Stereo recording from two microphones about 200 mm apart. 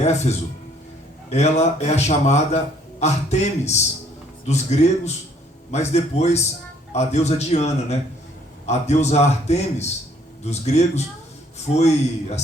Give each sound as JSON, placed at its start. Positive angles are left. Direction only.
{"t": 0.0, "sound": "a man's voice", "side_deg": 35}